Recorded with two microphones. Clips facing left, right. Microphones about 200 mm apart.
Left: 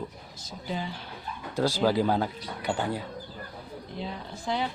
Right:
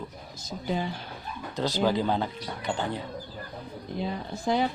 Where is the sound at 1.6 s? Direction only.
10° left (ahead or behind).